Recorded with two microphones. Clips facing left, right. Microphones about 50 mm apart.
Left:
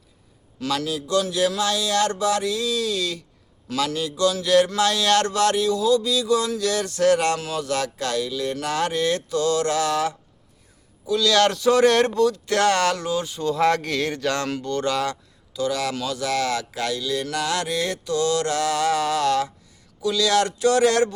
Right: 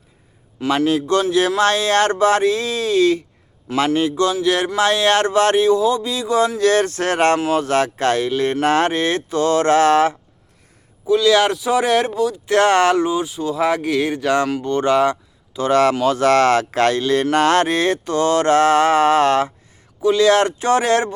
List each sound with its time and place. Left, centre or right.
0.6 s speech: right
0.9 s speech: right
11.0 s speech: right; by 12.4 s centre
12.5 s speech: right
13.2 s speech: centre
14.6 s speech: right
15.6 s speech: right
16.2 s speech: right